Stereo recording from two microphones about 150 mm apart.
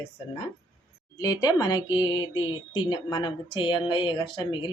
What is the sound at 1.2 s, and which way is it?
Speech, 25° left (ahead or behind).